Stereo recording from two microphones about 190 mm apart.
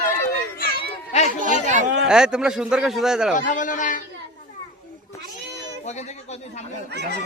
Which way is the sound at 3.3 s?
45° left (ahead or behind).